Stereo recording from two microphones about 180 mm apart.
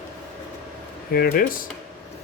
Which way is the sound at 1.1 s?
55° left (ahead or behind).